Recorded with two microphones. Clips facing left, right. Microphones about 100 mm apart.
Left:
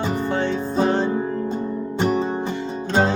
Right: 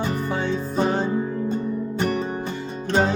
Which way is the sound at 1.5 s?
20° left (ahead or behind).